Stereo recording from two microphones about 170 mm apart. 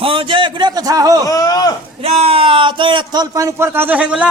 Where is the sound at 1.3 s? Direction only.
20° left (ahead or behind).